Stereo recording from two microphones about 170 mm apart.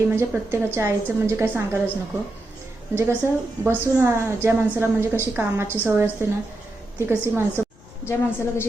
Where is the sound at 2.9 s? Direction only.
15° right (ahead or behind).